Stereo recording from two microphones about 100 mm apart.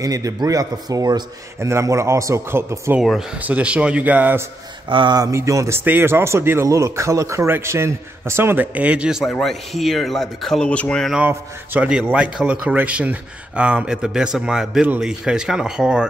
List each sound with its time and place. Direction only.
0.0 s a man's voice: 35° right (ahead or behind)
1.6 s speech: 30° right (ahead or behind)
3.0 s speech: 5° right (ahead or behind)
3.3 s speech: 15° right (ahead or behind)
4.8 s a man's voice: 50° right (ahead or behind); by 9.2 s 10° right (ahead or behind)
9.2 s speech: 5° left (ahead or behind)
11.2 s speech: 20° right (ahead or behind)
11.9 s speech: 10° right (ahead or behind)